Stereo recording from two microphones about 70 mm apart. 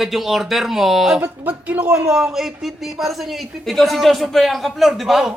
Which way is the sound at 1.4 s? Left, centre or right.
Right.